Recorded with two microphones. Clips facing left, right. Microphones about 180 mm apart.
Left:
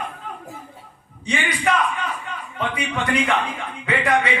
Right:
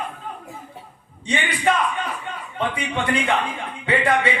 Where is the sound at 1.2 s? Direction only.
30° right (ahead or behind).